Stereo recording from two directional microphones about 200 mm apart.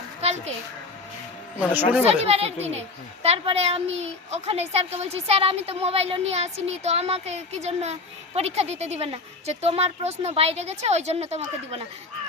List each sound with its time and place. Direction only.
0.2 s a sound: 30° right (ahead or behind)
1.5 s speech: 5° right (ahead or behind)
2.0 s a child's voice: 30° right (ahead or behind)